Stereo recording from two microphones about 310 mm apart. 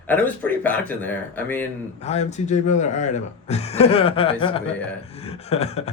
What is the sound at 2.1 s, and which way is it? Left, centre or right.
Speech, left.